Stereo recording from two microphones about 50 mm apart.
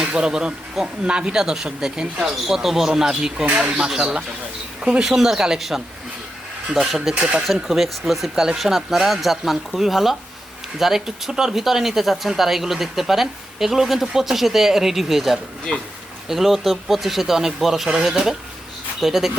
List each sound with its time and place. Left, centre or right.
0.0 s speech: centre
7.1 s speech: right
7.4 s speech: centre